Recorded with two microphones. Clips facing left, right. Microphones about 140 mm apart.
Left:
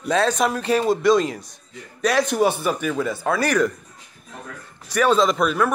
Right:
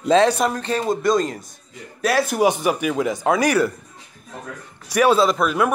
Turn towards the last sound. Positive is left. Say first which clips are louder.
# right 1 dB
turn(degrees=-5)  # may be behind; listen again after turning